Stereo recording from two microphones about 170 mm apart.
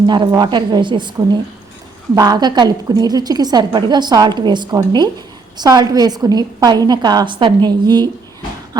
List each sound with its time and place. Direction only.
0.0 s a woman's voice: 25° right (ahead or behind)